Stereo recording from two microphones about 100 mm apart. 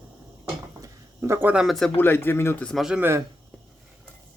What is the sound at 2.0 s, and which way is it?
Speech, 20° left (ahead or behind).